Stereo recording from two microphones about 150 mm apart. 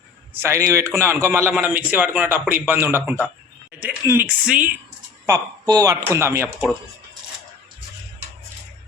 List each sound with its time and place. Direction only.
0.3 s a man's voice: 20° right (ahead or behind)
5.6 s speech: 25° right (ahead or behind)